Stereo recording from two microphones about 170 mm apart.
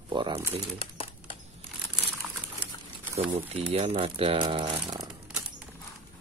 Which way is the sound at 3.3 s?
35° right (ahead or behind).